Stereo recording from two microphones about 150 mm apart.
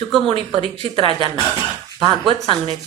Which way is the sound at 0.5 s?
35° right (ahead or behind).